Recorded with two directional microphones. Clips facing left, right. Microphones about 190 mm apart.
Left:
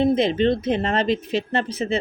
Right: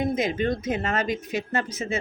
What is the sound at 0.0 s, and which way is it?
Speech, 30° left (ahead or behind).